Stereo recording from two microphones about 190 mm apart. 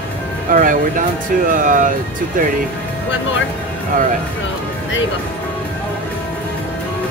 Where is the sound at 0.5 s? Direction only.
45° right (ahead or behind).